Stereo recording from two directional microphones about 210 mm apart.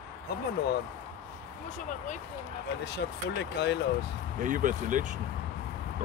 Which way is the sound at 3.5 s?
55° left (ahead or behind).